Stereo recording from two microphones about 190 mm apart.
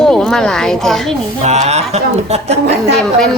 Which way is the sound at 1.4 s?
35° right (ahead or behind).